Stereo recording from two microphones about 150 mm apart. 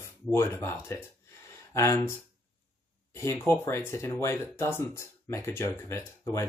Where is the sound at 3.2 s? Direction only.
15° left (ahead or behind).